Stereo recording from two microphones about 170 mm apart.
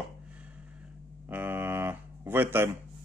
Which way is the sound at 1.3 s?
10° right (ahead or behind).